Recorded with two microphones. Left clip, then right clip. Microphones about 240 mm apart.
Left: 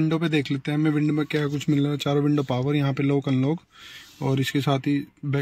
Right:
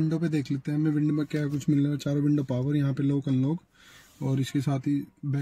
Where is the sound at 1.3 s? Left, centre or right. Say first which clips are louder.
Left 4 dB; left.